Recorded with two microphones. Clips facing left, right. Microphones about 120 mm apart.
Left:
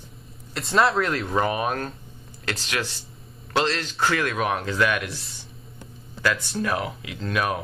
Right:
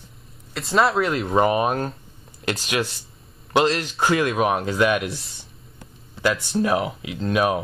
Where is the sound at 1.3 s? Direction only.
30° right (ahead or behind).